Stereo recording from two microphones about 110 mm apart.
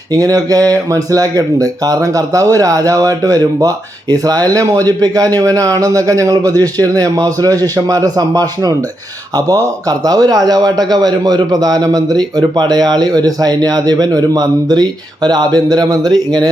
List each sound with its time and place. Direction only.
0.1 s a man's voice: 35° right (ahead or behind)